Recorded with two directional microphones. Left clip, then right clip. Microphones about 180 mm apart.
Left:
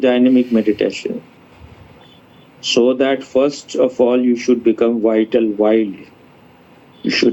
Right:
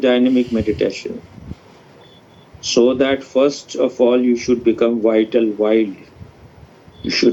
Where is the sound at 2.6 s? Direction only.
55° left (ahead or behind).